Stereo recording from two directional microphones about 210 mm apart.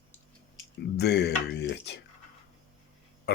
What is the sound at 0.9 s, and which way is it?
Speech, 55° left (ahead or behind).